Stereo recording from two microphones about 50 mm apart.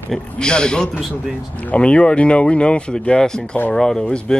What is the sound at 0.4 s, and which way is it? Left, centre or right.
Speech, centre.